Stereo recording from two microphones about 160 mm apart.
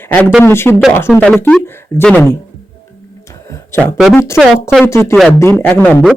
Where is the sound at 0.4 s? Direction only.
15° left (ahead or behind).